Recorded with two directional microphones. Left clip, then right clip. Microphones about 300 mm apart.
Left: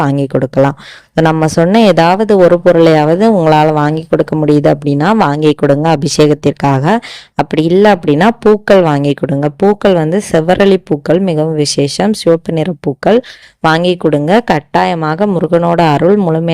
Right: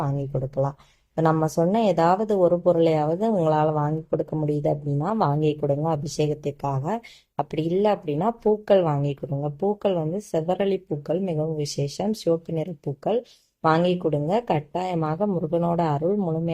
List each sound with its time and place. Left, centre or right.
1.1 s speech: left